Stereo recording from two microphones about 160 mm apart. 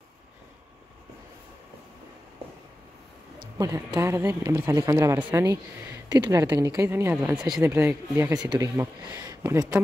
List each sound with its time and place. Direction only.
3.5 s speech: 20° right (ahead or behind)
7.2 s speech: centre (ahead or behind)
7.6 s speech: 15° right (ahead or behind)